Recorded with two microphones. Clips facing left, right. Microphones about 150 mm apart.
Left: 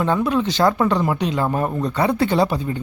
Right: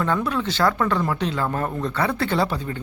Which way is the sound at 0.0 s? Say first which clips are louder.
Left 4 dB; 20° left (ahead or behind).